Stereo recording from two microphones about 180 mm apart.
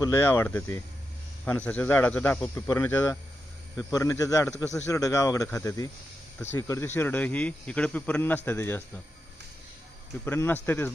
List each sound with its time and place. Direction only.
0.0 s speech: 15° left (ahead or behind)
10.2 s speech: 10° left (ahead or behind)